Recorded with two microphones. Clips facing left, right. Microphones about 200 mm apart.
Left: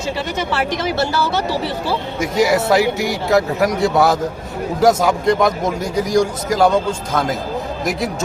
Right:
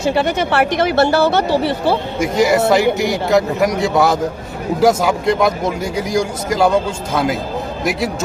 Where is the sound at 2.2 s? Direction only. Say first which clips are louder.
Even; centre (ahead or behind).